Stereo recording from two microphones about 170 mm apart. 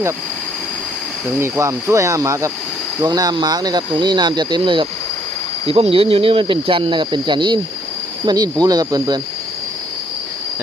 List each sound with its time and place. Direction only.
1.4 s speech: 15° right (ahead or behind)